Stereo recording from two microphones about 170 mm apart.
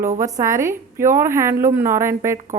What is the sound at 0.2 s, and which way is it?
Speech, 15° right (ahead or behind).